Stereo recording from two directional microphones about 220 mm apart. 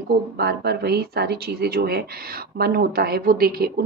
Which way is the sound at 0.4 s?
45° right (ahead or behind).